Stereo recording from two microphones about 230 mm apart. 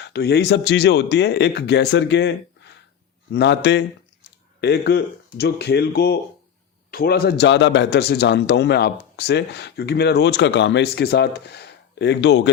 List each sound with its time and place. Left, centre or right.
0.0 s a man's voice: left
3.3 s a man's voice: left